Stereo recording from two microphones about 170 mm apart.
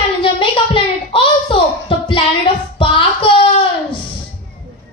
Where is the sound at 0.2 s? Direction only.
30° left (ahead or behind).